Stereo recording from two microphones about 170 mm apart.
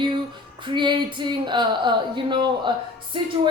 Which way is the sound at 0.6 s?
30° right (ahead or behind).